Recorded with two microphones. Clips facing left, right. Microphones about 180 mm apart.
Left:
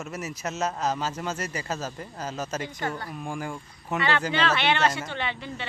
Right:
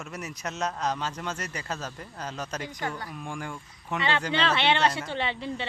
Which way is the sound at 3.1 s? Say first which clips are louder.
Left 3 dB; 5° left (ahead or behind).